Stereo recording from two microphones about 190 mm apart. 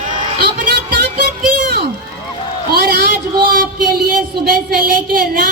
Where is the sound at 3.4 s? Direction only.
50° right (ahead or behind).